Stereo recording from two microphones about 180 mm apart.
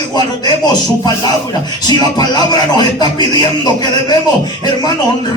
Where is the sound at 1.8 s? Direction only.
20° left (ahead or behind).